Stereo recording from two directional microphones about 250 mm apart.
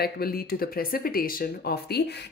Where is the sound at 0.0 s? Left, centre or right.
Left.